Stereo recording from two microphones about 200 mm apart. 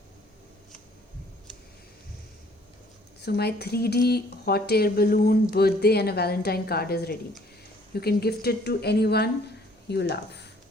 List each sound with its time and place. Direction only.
3.2 s speech: 55° left (ahead or behind)